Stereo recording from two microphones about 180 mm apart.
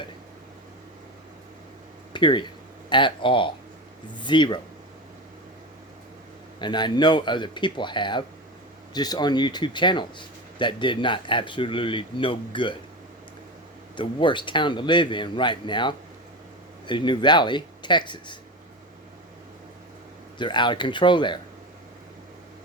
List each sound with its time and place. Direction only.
2.1 s speech: 25° left (ahead or behind)
6.6 s speech: 25° left (ahead or behind)
13.9 s speech: 25° left (ahead or behind)
20.4 s speech: 25° left (ahead or behind)